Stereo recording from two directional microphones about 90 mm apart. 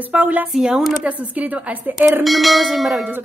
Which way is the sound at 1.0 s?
15° right (ahead or behind).